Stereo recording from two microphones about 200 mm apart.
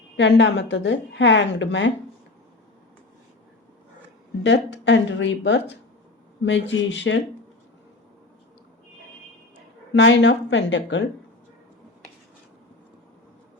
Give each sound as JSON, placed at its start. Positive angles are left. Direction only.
{"t": 0.2, "sound": "a woman's voice", "side_deg": 60}
{"t": 4.4, "sound": "a woman's voice", "side_deg": 60}
{"t": 9.9, "sound": "a woman's voice", "side_deg": 60}